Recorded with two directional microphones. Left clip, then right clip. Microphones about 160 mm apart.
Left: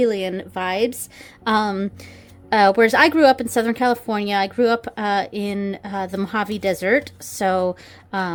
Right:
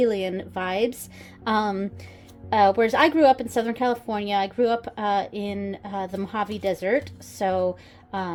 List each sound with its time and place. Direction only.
0.0 s a woman's voice: 20° left (ahead or behind)
2.5 s a woman's voice: 40° left (ahead or behind)